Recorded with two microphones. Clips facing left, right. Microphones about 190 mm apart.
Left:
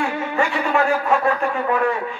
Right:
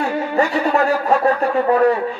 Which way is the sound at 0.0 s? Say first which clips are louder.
Right 3 dB; 40° right (ahead or behind).